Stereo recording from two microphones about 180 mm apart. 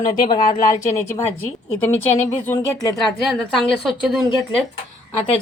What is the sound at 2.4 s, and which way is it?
Speech, 15° left (ahead or behind).